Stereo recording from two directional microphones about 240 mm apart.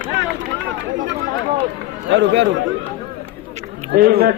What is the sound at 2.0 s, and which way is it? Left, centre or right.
Speech, right.